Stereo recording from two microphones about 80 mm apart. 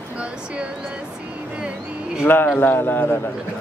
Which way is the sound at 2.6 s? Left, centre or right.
Left.